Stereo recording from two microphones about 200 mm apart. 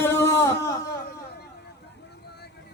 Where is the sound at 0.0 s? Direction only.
15° left (ahead or behind).